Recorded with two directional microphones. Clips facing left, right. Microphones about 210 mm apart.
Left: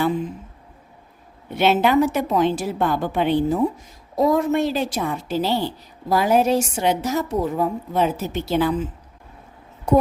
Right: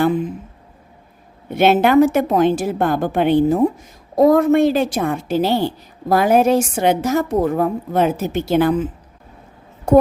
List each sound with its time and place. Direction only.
1.5 s a woman's voice: 50° right (ahead or behind)